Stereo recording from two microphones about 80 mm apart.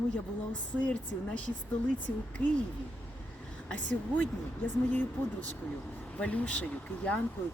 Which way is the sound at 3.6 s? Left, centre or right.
Centre.